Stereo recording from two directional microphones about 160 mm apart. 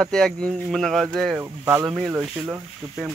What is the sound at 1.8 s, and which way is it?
Speech, 5° right (ahead or behind).